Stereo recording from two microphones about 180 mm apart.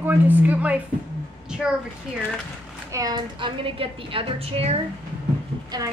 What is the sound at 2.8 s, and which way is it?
A woman's voice, 20° right (ahead or behind).